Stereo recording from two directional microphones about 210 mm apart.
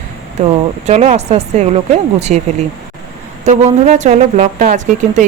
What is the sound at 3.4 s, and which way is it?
Speech, 35° right (ahead or behind).